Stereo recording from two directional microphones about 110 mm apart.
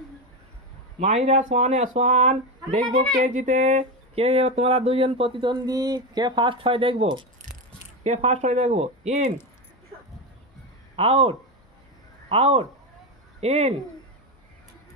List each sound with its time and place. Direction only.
0.9 s speech: 85° right; by 7.2 s 50° right (ahead or behind)
8.0 s speech: 90° right
11.0 s speech: 65° right (ahead or behind)
13.4 s speech: 90° right